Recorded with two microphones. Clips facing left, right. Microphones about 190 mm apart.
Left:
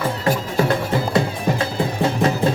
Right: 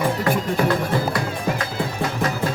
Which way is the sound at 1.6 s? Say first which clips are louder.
Left 4 dB; 30° left (ahead or behind).